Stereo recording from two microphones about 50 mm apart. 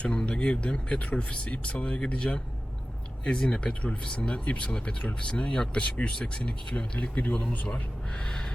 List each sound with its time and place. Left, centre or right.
0.0 s speech: left
8.2 s gasp: centre